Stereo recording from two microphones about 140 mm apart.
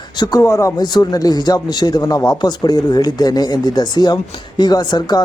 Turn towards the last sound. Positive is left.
turn(degrees=30)  # may be behind; listen again after turning